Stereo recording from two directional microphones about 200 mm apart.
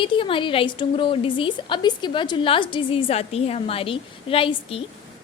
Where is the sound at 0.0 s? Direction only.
25° left (ahead or behind).